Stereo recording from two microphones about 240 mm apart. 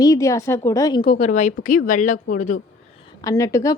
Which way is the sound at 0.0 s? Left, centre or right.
Centre.